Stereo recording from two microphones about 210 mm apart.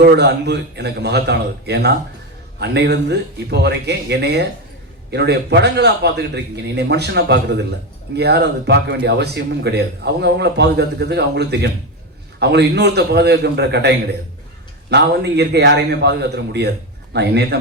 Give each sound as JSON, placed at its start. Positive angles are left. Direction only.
{"t": 0.0, "sound": "speech", "side_deg": -50}